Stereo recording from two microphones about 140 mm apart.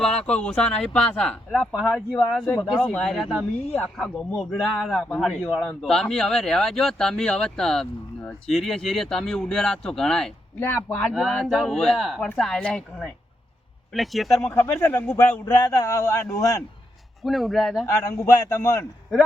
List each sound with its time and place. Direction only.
0.0 s speech: 5° left (ahead or behind)
14.5 s a man's voice: 15° left (ahead or behind)
17.2 s speech: centre (ahead or behind)
18.3 s speech: 25° left (ahead or behind)